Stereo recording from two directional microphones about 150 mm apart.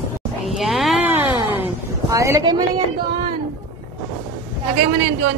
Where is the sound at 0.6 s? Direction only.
Centre (ahead or behind).